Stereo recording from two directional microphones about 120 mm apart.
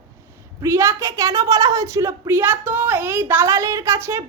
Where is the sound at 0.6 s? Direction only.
25° right (ahead or behind).